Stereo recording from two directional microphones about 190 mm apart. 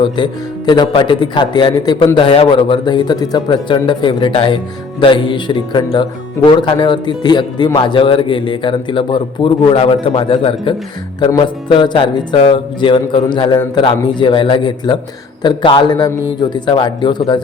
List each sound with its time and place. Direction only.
0.0 s speech: 25° left (ahead or behind)